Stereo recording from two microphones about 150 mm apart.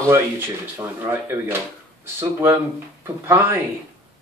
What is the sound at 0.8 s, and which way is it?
Speech, 15° right (ahead or behind).